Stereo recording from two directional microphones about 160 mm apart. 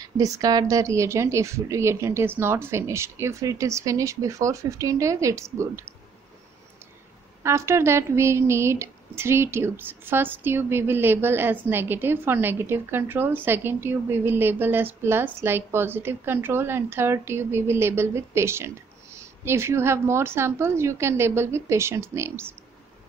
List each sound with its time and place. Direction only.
0.0 s a woman's voice: 25° right (ahead or behind)
7.4 s speech: 15° right (ahead or behind)